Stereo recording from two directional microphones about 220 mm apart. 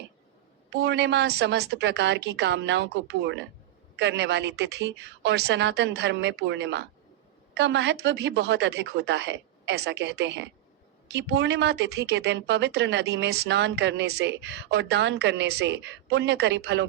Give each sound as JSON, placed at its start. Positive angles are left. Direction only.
{"t": 0.7, "sound": "speech", "side_deg": -50}